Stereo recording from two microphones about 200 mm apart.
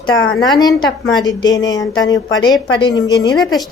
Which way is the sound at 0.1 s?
80° left.